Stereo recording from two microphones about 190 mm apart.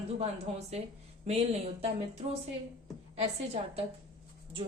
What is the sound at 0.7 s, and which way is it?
A woman's voice, 35° right (ahead or behind).